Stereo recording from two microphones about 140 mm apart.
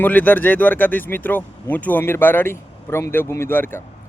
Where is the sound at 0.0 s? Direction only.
10° left (ahead or behind).